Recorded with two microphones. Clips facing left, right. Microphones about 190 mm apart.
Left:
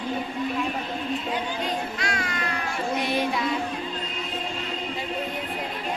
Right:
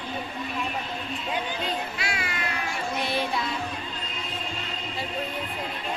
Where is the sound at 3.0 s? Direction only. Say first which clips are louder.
Left 2 dB; 15° left (ahead or behind).